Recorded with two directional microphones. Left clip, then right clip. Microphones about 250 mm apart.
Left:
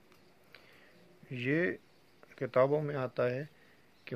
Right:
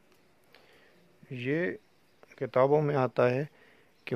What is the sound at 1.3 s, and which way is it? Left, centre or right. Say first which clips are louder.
Speech: right 1 dB; right.